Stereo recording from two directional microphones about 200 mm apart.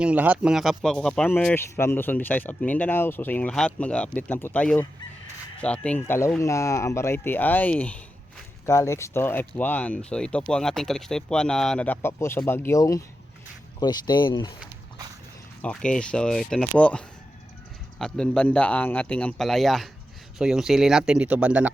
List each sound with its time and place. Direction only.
0.0 s speech: 5° right (ahead or behind); by 14.5 s 25° left (ahead or behind)
15.6 s speech: 5° left (ahead or behind)
18.0 s speech: 5° left (ahead or behind)